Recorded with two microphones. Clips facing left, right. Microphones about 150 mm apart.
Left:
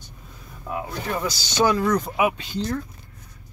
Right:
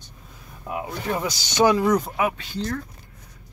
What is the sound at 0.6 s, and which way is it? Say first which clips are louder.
Speech: right 1 dB; 15° right (ahead or behind).